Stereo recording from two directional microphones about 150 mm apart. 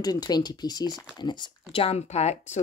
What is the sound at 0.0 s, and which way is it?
Speech, 25° left (ahead or behind).